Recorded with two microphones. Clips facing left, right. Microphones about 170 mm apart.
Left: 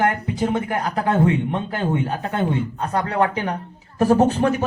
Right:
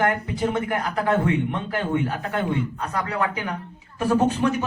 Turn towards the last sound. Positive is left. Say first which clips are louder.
# left 4 dB
turn(degrees=45)  # may be behind; listen again after turning